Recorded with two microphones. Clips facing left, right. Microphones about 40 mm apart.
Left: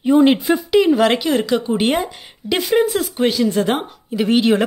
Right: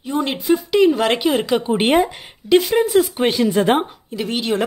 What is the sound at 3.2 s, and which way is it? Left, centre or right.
Speech, right.